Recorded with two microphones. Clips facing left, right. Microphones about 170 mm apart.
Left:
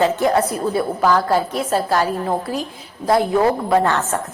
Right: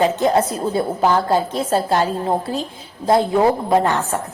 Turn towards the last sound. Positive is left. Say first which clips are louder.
# even
turn(degrees=-20)  # may be behind; listen again after turning